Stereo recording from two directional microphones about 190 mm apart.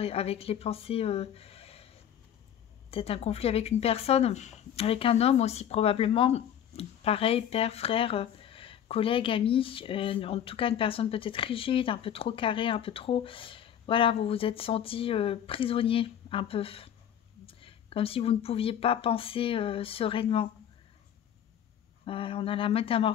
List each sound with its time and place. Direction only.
0.0 s speech: 30° left (ahead or behind)
2.9 s speech: 30° left (ahead or behind)
22.0 s speech: 30° left (ahead or behind)